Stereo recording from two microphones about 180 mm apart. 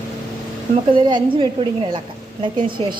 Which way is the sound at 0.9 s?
25° right (ahead or behind).